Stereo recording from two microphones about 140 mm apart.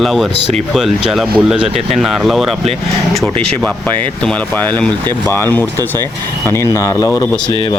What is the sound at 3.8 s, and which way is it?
Speech, 10° left (ahead or behind).